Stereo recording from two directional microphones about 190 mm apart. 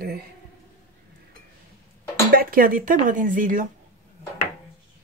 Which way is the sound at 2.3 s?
50° right (ahead or behind).